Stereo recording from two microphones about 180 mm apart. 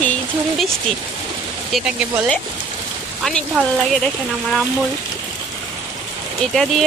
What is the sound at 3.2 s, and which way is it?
Speech, centre (ahead or behind).